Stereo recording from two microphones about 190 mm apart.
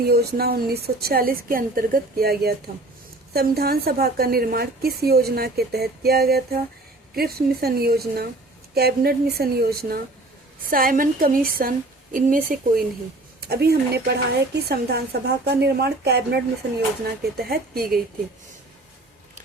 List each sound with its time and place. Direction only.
0.0 s a woman's voice: 55° right (ahead or behind)
13.5 s a woman's voice: 55° right (ahead or behind)